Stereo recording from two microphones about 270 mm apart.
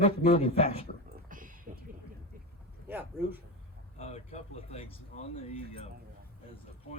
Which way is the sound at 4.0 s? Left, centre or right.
Left.